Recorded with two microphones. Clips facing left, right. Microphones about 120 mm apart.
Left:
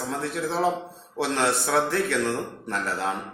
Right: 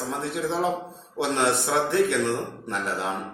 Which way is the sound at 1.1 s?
25° right (ahead or behind).